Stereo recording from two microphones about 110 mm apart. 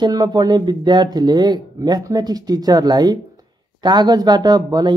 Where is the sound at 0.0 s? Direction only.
35° right (ahead or behind).